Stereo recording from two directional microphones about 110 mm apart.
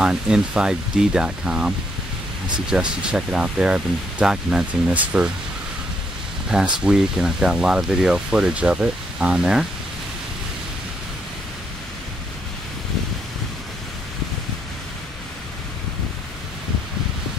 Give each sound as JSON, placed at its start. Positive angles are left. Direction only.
{"t": 0.0, "sound": "speech", "side_deg": -10}
{"t": 2.7, "sound": "speech", "side_deg": -10}
{"t": 6.5, "sound": "speech", "side_deg": -10}